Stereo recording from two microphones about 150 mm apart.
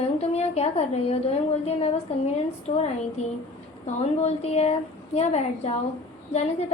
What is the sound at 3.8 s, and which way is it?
A woman's voice, 45° left (ahead or behind).